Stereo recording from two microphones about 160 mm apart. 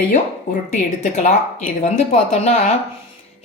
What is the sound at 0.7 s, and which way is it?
A woman's voice, 45° left (ahead or behind).